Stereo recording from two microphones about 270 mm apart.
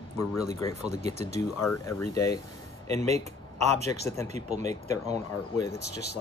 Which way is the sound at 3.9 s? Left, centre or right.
Centre.